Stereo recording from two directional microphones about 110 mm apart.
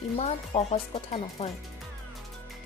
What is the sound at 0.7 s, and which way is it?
Speech, 70° left (ahead or behind).